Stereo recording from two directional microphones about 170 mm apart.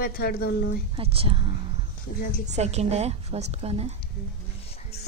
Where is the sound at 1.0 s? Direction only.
35° right (ahead or behind).